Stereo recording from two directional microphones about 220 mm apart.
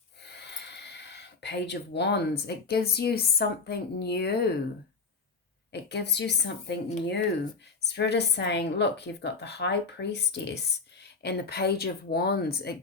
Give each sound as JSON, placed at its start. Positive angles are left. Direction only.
{"t": 0.3, "sound": "speech", "side_deg": 50}
{"t": 5.7, "sound": "a woman's voice", "side_deg": 50}
{"t": 7.8, "sound": "a woman's voice", "side_deg": 50}